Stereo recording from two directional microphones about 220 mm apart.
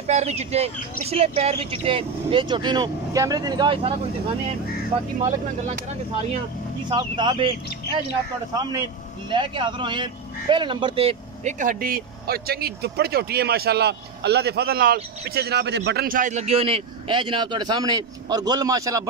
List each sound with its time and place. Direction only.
0.0 s a man's voice: 30° right (ahead or behind)
5.2 s a man's voice: 30° right (ahead or behind)
9.3 s a man's voice: 20° right (ahead or behind)